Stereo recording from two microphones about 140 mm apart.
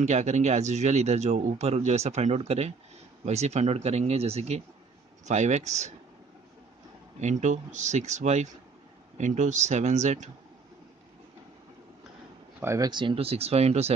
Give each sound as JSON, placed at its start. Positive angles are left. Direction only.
{"t": 0.0, "sound": "speech", "side_deg": -55}
{"t": 7.2, "sound": "speech", "side_deg": -55}
{"t": 12.5, "sound": "speech", "side_deg": -20}